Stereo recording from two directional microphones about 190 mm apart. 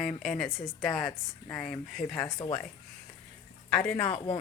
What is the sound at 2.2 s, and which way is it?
Speech, 25° left (ahead or behind).